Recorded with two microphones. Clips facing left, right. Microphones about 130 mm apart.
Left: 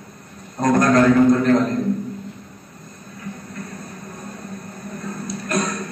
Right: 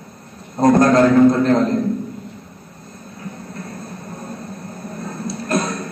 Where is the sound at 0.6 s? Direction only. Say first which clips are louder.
Right 3 dB; 30° right (ahead or behind).